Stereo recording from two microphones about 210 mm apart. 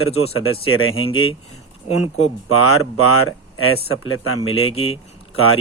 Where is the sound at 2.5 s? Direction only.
90° left.